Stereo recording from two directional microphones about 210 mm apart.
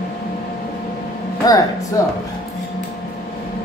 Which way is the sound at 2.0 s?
15° left (ahead or behind).